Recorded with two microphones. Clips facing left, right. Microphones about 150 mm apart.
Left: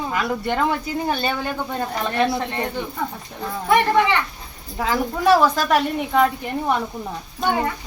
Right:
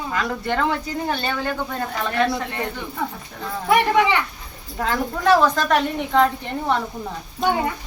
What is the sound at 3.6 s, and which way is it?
Speech, 10° right (ahead or behind).